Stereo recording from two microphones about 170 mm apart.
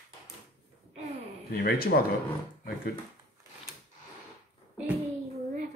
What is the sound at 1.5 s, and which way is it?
Speech, 60° left (ahead or behind).